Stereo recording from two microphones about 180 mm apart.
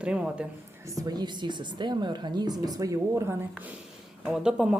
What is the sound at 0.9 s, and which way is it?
A woman's voice, 20° right (ahead or behind).